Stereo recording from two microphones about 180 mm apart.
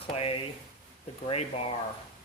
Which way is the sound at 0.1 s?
30° left (ahead or behind).